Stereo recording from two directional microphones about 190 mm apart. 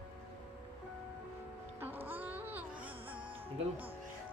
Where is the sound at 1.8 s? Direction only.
10° right (ahead or behind).